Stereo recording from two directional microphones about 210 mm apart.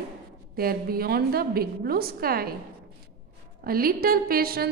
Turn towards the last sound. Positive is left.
turn(degrees=-45)  # may be behind; listen again after turning